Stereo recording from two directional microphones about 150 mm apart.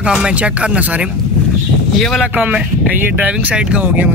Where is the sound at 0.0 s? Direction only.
5° right (ahead or behind).